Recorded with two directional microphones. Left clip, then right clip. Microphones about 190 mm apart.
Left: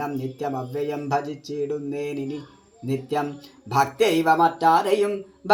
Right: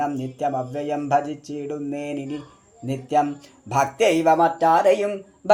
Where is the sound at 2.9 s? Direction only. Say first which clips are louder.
Right 5 dB; 35° right (ahead or behind).